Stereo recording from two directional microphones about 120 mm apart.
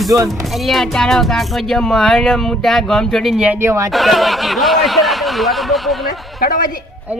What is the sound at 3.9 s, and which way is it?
Speech, centre (ahead or behind).